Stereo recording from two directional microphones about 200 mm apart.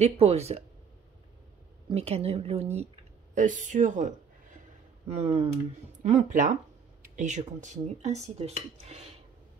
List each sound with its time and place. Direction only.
0.0 s speech: 30° right (ahead or behind)
1.9 s speech: 30° right (ahead or behind)